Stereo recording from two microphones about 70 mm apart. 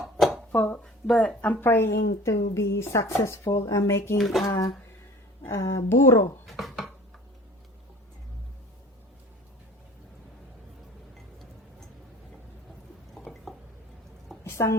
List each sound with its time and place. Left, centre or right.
0.0 s a sound: centre
0.5 s a woman's voice: left
1.0 s speech: centre
1.4 s a woman's voice: left
1.7 s speech: left
4.2 s speech: centre
4.4 s speech: left
5.5 s speech: left
6.4 s dishes: centre
13.3 s drip: centre
14.4 s a sound: left